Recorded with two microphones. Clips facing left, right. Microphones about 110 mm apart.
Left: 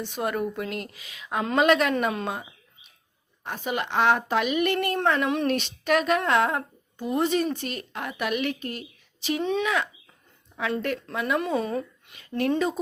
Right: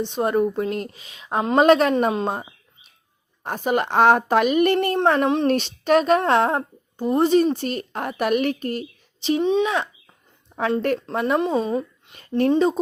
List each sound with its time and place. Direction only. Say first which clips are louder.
0.0 s a woman's voice: right 7 dB; 30° right (ahead or behind)
3.4 s speech: right 7 dB; 45° right (ahead or behind)
9.4 s a woman's voice: right 4 dB; 20° right (ahead or behind)
10.5 s a sound: right 6 dB; 40° right (ahead or behind)
11.0 s speech: right 5 dB; 40° right (ahead or behind)
11.3 s a woman's voice: right 4 dB; 25° right (ahead or behind)